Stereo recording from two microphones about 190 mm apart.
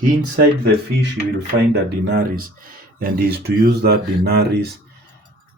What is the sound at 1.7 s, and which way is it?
Speech, 50° right (ahead or behind).